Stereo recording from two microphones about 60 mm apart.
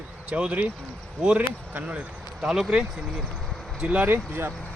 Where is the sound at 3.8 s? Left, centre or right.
Right.